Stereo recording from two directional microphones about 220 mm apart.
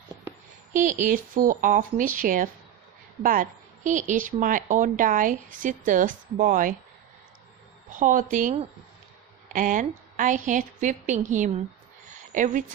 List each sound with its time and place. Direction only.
0.7 s a woman's voice: 35° right (ahead or behind)
3.8 s a woman's voice: 35° right (ahead or behind)
7.9 s a woman's voice: 35° right (ahead or behind)